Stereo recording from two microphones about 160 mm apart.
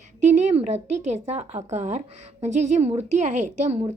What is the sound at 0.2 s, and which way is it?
Speech, 50° right (ahead or behind).